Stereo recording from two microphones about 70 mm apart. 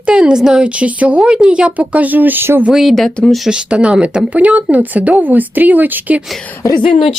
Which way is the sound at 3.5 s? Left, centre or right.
Centre.